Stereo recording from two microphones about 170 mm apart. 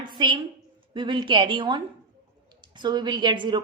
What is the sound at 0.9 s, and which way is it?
A woman's voice, 30° right (ahead or behind).